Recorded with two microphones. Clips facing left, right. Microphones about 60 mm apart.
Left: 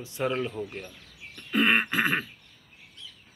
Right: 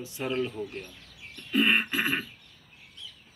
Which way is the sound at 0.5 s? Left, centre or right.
Left.